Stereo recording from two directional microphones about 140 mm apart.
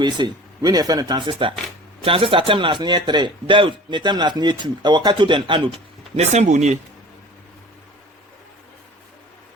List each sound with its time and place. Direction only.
0.0 s speech: 30° right (ahead or behind)
6.1 s speech: 55° right (ahead or behind)